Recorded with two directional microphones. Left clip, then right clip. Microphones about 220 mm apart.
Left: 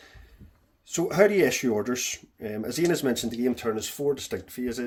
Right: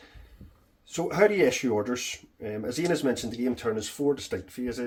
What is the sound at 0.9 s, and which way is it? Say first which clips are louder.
Speech: left 2 dB; 50° left (ahead or behind).